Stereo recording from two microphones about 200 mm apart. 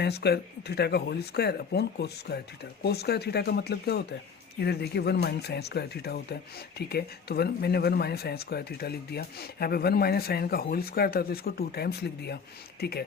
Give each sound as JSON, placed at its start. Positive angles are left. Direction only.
{"t": 0.0, "sound": "speech", "side_deg": 55}